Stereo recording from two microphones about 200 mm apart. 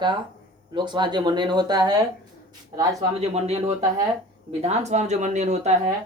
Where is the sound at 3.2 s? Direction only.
30° right (ahead or behind).